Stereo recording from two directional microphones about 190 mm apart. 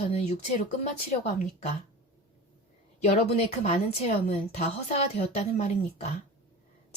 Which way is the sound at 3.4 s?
35° left (ahead or behind).